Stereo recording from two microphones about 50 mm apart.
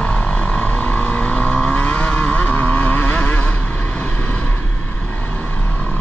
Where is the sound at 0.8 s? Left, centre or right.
Left.